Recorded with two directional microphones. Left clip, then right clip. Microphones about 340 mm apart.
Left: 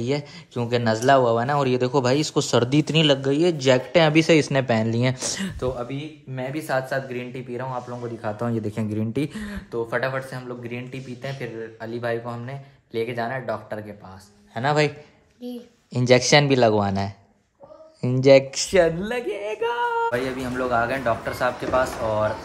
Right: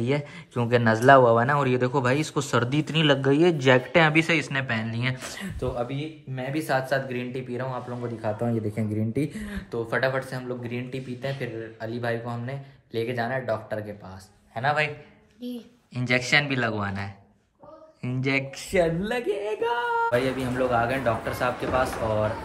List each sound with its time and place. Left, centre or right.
0.0 s speech: centre
5.8 s speech: centre
8.9 s speech: centre
14.5 s a man's voice: left
15.4 s speech: centre
18.5 s speech: left
19.0 s speech: centre